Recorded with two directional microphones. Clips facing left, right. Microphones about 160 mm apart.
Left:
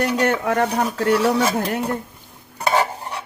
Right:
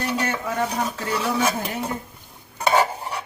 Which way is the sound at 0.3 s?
65° left (ahead or behind).